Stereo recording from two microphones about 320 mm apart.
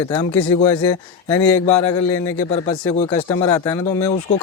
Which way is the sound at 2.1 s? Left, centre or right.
Left.